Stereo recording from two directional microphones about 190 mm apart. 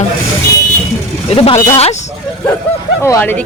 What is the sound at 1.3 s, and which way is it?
Speech, 30° left (ahead or behind).